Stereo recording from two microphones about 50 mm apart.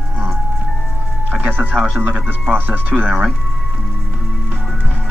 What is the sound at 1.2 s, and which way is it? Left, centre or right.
Music, right.